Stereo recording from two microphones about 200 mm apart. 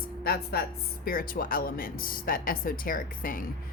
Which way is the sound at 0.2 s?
50° left (ahead or behind).